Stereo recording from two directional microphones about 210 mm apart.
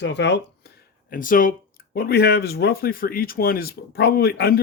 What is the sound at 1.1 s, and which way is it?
Speech, 40° left (ahead or behind).